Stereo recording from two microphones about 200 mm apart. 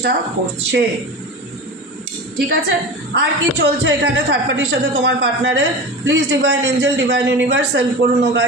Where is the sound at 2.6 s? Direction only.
55° right (ahead or behind).